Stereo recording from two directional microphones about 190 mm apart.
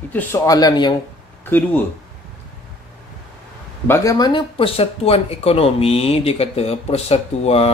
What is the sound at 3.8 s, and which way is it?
Speech, 15° left (ahead or behind).